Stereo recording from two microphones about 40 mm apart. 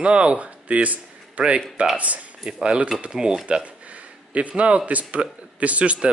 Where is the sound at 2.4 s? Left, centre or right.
Right.